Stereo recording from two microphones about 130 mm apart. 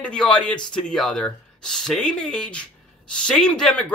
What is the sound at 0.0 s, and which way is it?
Speech, 5° left (ahead or behind).